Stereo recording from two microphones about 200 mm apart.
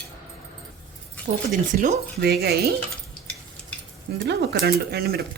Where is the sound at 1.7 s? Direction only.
40° right (ahead or behind).